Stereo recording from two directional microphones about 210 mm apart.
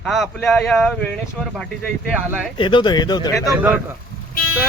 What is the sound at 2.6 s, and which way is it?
Speech, 25° left (ahead or behind).